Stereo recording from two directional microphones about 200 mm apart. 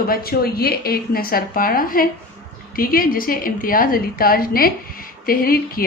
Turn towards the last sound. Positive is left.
turn(degrees=45)  # may be behind; listen again after turning